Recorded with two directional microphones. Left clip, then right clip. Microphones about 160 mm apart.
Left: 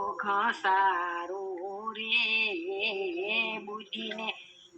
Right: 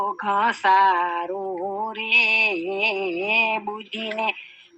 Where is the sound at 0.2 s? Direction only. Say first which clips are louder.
Right 6 dB; 35° right (ahead or behind).